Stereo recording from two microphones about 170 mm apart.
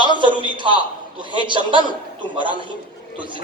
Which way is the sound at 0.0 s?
30° right (ahead or behind).